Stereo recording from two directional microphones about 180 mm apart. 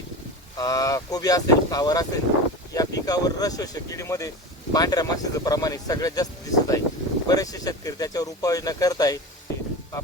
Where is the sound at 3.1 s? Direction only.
20° left (ahead or behind).